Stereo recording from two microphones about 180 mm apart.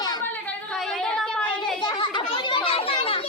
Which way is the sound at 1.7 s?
25° left (ahead or behind).